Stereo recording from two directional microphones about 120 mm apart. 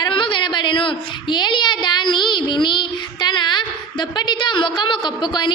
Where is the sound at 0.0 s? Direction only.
45° left (ahead or behind).